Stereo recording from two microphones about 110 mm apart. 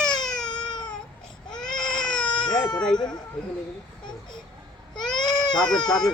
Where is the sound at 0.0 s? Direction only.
5° left (ahead or behind).